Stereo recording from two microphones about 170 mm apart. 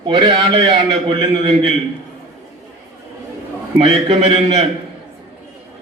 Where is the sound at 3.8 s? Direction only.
40° right (ahead or behind).